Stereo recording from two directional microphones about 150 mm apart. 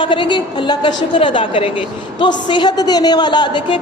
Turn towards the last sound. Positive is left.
turn(degrees=30)  # may be behind; listen again after turning